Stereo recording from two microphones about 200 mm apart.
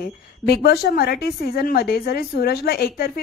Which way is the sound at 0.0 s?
50° left (ahead or behind).